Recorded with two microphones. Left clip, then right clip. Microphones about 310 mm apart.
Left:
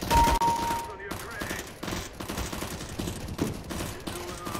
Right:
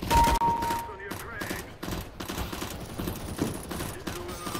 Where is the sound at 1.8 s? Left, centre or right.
Centre.